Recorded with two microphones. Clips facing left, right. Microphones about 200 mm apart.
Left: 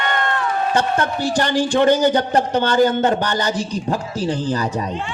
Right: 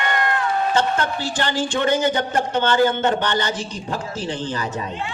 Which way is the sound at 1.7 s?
35° left (ahead or behind).